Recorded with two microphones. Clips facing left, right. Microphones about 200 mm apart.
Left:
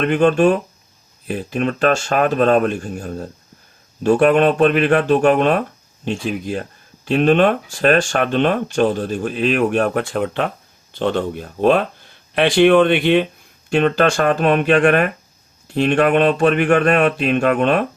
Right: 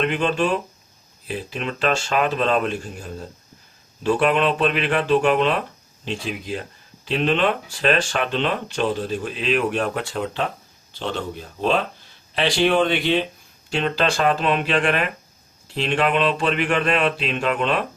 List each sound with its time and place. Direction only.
0.0 s speech: 50° left (ahead or behind)